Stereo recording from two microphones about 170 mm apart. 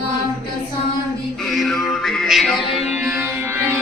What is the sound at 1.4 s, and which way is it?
Music, centre (ahead or behind).